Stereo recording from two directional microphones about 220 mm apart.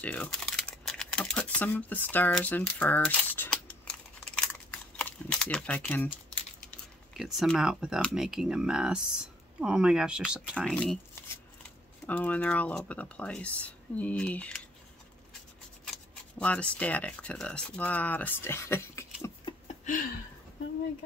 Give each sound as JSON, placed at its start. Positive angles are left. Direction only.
{"t": 0.0, "sound": "speech", "side_deg": 5}
{"t": 3.8, "sound": "a sound", "side_deg": 5}
{"t": 7.2, "sound": "speech", "side_deg": 0}
{"t": 12.1, "sound": "speech", "side_deg": 5}
{"t": 15.9, "sound": "speech", "side_deg": 5}
{"t": 19.7, "sound": "a sound", "side_deg": 30}